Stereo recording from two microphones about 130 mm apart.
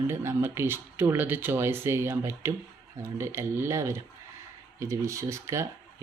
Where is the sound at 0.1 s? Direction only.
20° right (ahead or behind).